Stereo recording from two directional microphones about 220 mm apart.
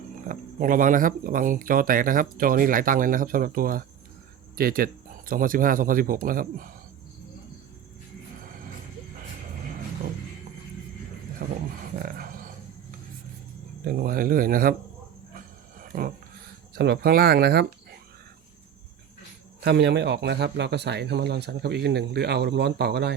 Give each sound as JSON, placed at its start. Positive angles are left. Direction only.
{"t": 0.3, "sound": "speech", "side_deg": -35}
{"t": 11.4, "sound": "a sound", "side_deg": -45}
{"t": 13.8, "sound": "speech", "side_deg": -40}
{"t": 15.9, "sound": "speech", "side_deg": -40}
{"t": 19.6, "sound": "speech", "side_deg": -50}